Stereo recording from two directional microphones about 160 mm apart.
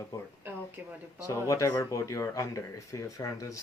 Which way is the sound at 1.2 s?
20° left (ahead or behind).